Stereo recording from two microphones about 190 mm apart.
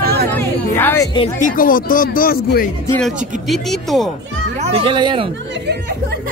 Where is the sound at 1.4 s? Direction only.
45° left (ahead or behind).